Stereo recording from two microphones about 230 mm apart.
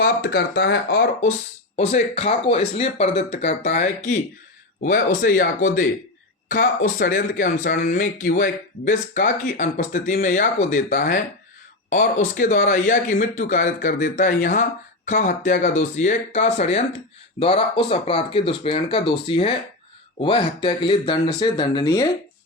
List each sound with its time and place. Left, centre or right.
0.0 s speech: left; by 22.1 s centre